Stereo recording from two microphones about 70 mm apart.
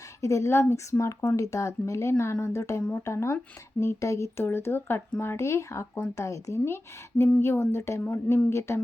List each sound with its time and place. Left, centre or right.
0.2 s speech: left
6.1 s speech: left